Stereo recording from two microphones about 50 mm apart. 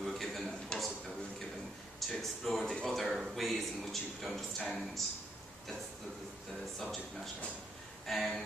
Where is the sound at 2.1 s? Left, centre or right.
Centre.